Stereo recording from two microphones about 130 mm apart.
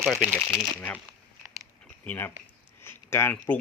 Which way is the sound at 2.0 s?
15° left (ahead or behind).